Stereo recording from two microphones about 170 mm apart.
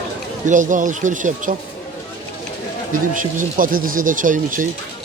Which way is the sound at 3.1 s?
55° right (ahead or behind).